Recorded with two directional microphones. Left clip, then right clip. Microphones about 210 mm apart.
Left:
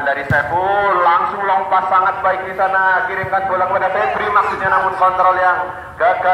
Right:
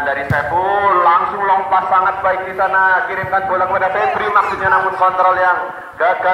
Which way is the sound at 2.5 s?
20° right (ahead or behind).